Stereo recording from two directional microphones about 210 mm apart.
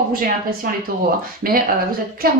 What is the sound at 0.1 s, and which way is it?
Speech, 45° right (ahead or behind).